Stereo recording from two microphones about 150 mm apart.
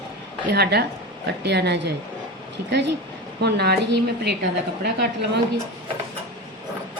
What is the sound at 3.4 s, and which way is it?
Speech, 90° right.